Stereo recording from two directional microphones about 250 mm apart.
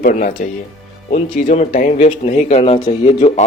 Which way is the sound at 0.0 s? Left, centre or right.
Left.